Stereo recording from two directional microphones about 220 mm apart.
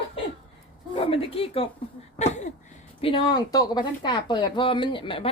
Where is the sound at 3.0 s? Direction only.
20° left (ahead or behind).